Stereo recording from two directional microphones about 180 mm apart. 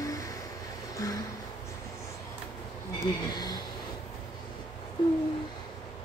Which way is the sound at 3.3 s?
20° left (ahead or behind).